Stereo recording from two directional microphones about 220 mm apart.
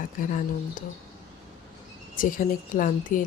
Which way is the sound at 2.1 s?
40° left (ahead or behind).